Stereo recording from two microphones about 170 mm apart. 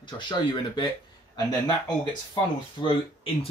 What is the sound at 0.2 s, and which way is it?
Speech, 25° left (ahead or behind).